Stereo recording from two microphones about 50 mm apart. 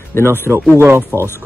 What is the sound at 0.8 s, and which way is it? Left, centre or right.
Speech, right.